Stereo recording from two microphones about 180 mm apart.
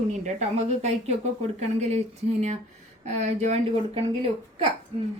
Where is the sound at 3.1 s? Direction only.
40° right (ahead or behind).